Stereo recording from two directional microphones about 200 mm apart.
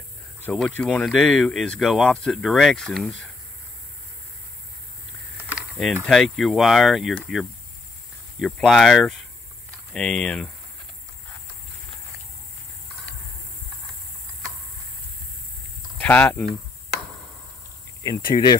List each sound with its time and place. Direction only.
0.4 s speech: 5° left (ahead or behind)
5.5 s a sound: centre (ahead or behind)
6.0 s speech: centre (ahead or behind)
16.0 s speech: 10° left (ahead or behind)
18.0 s speech: 20° left (ahead or behind)